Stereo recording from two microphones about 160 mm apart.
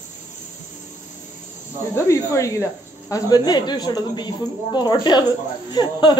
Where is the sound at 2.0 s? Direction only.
20° left (ahead or behind).